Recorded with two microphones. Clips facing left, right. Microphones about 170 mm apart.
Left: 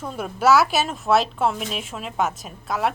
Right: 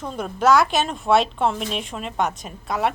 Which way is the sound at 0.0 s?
5° left (ahead or behind).